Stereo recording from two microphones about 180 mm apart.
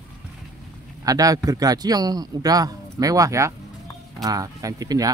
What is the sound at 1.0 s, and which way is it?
A man's voice, 20° right (ahead or behind).